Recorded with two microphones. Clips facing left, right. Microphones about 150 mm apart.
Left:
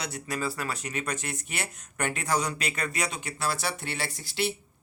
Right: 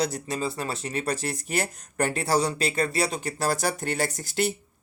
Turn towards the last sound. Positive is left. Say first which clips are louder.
# right 4 dB
turn(degrees=-45)  # may be behind; listen again after turning